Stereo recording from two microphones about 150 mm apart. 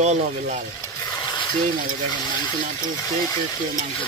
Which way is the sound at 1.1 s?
30° left (ahead or behind).